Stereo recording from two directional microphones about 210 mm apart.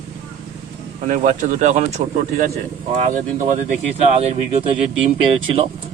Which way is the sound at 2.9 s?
35° right (ahead or behind).